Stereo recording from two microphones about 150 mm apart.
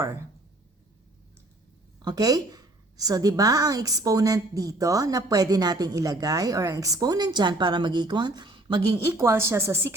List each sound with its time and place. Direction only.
2.0 s a woman's voice: 25° right (ahead or behind)
9.0 s a woman's voice: 20° right (ahead or behind)